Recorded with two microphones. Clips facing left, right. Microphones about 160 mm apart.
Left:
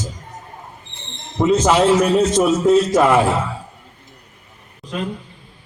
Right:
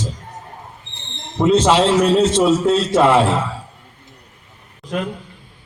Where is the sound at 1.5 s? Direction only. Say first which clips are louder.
Even; 30° right (ahead or behind).